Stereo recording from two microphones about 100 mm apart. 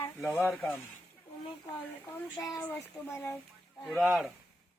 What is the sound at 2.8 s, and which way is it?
Speech, 30° left (ahead or behind).